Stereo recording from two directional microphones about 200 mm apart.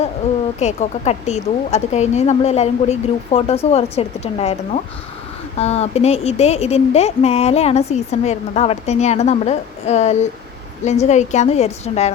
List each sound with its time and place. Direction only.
0.6 s speech: 35° left (ahead or behind)